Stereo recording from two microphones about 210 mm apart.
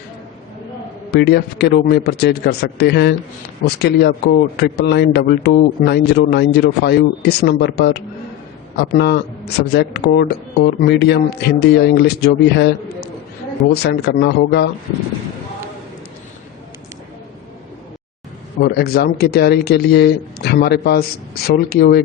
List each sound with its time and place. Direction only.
1.1 s speech: 50° left (ahead or behind)
18.6 s speech: 50° left (ahead or behind)